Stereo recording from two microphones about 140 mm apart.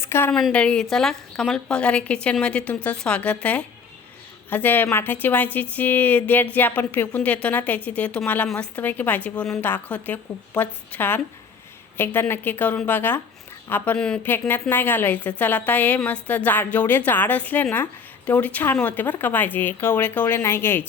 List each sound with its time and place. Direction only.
0.0 s a woman's voice: 15° left (ahead or behind)
0.3 s a woman's voice: 5° left (ahead or behind)